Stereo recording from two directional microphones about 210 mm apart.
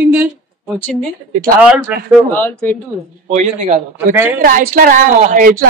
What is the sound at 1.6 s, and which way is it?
Speech, 5° right (ahead or behind).